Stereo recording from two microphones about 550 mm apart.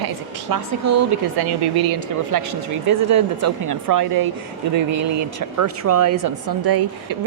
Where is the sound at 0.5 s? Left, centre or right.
Right.